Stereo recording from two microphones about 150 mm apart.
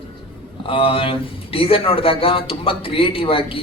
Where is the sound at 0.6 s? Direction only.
35° left (ahead or behind).